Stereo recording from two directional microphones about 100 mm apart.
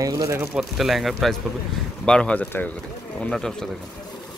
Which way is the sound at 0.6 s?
Centre (ahead or behind).